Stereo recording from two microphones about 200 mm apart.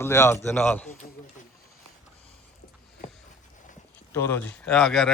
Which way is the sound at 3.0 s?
35° left (ahead or behind).